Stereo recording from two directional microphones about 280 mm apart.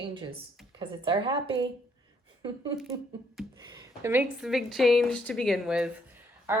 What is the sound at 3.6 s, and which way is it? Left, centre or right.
A woman's voice, centre.